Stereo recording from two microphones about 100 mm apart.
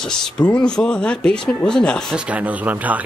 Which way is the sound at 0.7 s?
10° left (ahead or behind).